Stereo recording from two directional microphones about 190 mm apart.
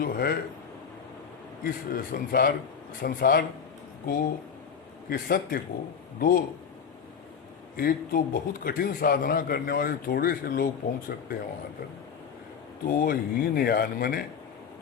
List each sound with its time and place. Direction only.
0.0 s a man's voice: 50° left (ahead or behind)
1.6 s a man's voice: 50° left (ahead or behind)
7.8 s a man's voice: 50° left (ahead or behind)
12.9 s a man's voice: 50° left (ahead or behind)